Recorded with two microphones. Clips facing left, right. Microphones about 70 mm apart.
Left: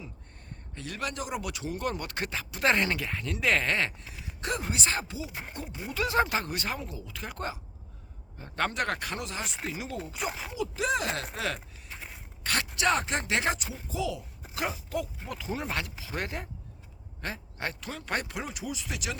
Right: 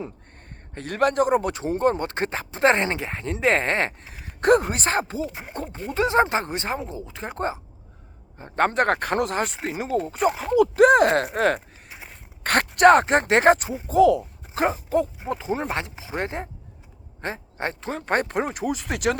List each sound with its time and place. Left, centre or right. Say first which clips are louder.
0.7 s speech: right 13 dB; right
5.3 s speech: right 3 dB; centre
5.5 s speech: right 10 dB; right
5.9 s speech: right 7 dB; right
10.3 s speech: right 15 dB; right
14.5 s a sound: right 10 dB; right
15.2 s speech: right 8 dB; right